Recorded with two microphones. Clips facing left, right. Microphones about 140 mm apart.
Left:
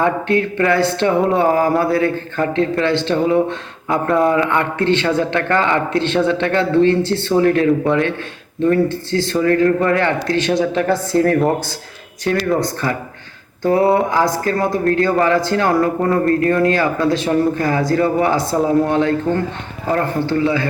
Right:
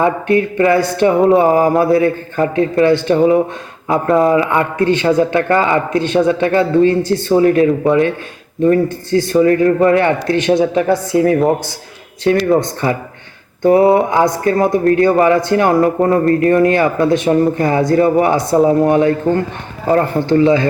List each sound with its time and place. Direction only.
0.0 s a man's voice: 15° right (ahead or behind)
4.1 s a man's voice: centre (ahead or behind)
4.4 s a man's voice: 15° right (ahead or behind)
9.3 s a man's voice: 20° right (ahead or behind)